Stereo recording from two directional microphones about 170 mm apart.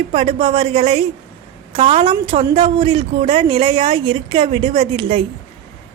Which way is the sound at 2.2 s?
30° right (ahead or behind).